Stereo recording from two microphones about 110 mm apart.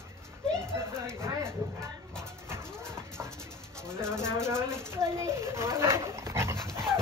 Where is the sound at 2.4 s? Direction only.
25° right (ahead or behind).